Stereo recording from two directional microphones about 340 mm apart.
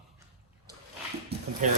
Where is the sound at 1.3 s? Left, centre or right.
Right.